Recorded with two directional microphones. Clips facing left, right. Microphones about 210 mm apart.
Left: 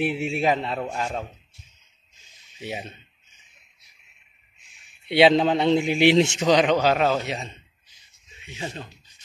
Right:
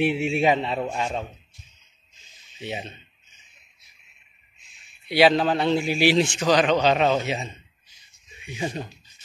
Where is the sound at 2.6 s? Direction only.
10° left (ahead or behind).